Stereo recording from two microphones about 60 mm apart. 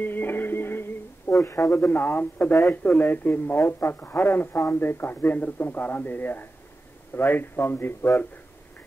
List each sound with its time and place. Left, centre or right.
0.0 s music: left
1.3 s speech: left